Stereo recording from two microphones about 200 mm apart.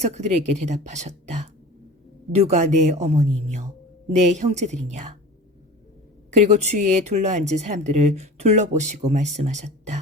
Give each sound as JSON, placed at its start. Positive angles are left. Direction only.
{"t": 0.0, "sound": "speech", "side_deg": -35}
{"t": 6.5, "sound": "speech", "side_deg": -35}